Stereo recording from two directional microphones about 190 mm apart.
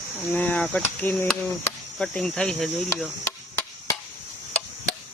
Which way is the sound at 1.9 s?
5° left (ahead or behind).